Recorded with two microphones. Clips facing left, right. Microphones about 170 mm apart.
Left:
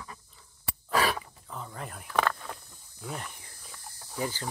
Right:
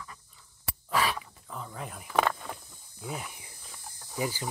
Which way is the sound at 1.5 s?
Centre (ahead or behind).